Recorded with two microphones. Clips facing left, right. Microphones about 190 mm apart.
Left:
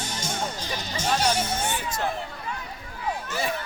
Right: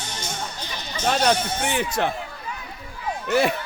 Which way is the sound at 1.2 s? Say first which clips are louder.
Right 3 dB; 80° right.